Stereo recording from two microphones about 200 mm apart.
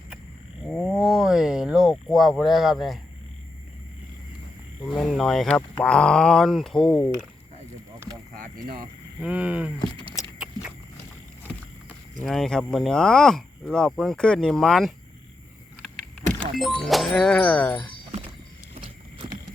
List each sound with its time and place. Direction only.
0.7 s speech: centre (ahead or behind)
4.8 s speech: centre (ahead or behind)
8.4 s speech: 45° right (ahead or behind)
9.2 s speech: 5° right (ahead or behind)
9.7 s a sound: 25° left (ahead or behind)
12.2 s speech: centre (ahead or behind)
16.4 s speech: centre (ahead or behind)
18.8 s vehicle: 25° right (ahead or behind)